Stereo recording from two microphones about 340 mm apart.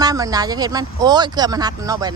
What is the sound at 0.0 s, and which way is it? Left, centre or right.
Speech, centre.